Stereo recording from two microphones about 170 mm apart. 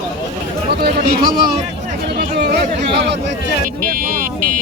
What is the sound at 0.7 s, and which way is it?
Chatter, 70° right (ahead or behind).